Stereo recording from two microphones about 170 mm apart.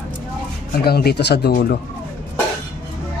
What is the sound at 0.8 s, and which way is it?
Speech, 65° left (ahead or behind).